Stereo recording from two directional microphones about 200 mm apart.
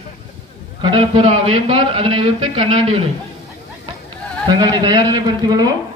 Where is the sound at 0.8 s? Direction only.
25° right (ahead or behind).